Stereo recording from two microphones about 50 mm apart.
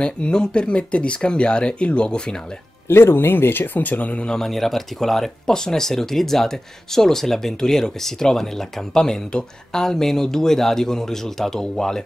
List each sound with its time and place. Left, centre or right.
0.0 s speech: centre
2.9 s speech: left
4.3 s speech: centre